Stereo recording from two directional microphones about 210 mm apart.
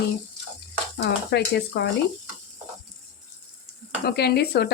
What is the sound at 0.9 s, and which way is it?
Speech, 55° left (ahead or behind).